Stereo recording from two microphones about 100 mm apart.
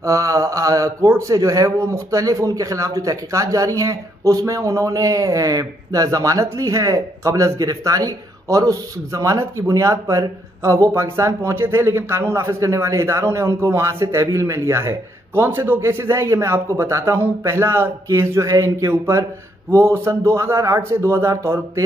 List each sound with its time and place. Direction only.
0.0 s a man's voice: 35° right (ahead or behind)